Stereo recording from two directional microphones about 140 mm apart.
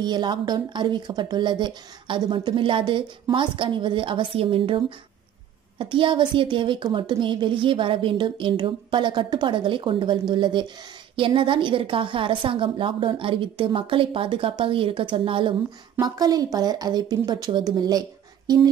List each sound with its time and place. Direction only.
0.0 s speech: 30° right (ahead or behind)
16.0 s speech: 25° right (ahead or behind)